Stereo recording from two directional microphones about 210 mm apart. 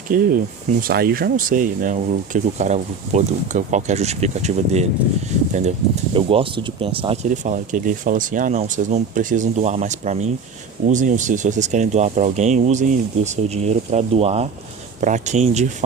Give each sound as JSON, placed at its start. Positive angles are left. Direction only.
{"t": 0.1, "sound": "speech", "side_deg": -40}
{"t": 6.1, "sound": "speech", "side_deg": -25}